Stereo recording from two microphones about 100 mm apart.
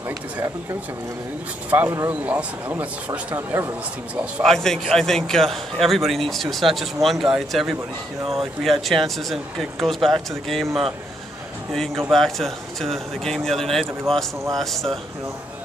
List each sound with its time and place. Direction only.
1.7 s a man's voice: 20° right (ahead or behind)
4.4 s a man's voice: 5° left (ahead or behind)